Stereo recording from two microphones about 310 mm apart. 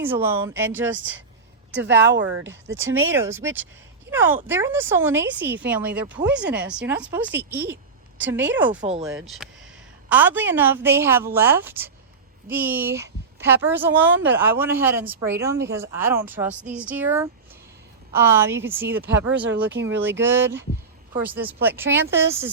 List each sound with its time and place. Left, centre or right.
0.0 s a woman's voice: centre
1.7 s speech: right
3.1 s a woman's voice: centre
9.2 s a woman's voice: centre
19.6 s speech: right
20.2 s a woman's voice: centre